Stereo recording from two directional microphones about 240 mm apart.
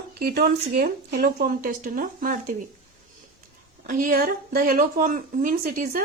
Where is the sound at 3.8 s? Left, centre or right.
Right.